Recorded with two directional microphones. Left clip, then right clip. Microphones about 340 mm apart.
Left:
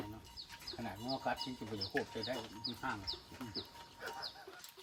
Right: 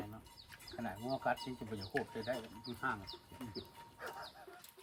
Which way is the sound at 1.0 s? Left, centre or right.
Centre.